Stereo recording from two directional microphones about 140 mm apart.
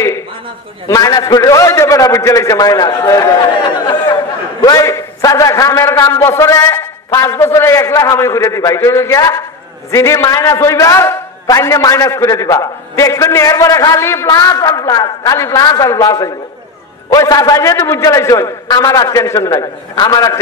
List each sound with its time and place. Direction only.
0.8 s a man's voice: 25° left (ahead or behind)